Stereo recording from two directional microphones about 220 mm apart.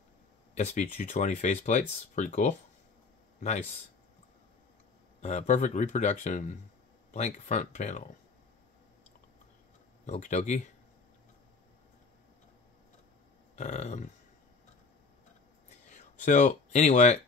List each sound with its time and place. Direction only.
0.6 s speech: 30° left (ahead or behind)
5.2 s speech: 35° left (ahead or behind)
10.0 s speech: 35° left (ahead or behind)
13.6 s speech: 30° left (ahead or behind)
15.9 s speech: 35° left (ahead or behind)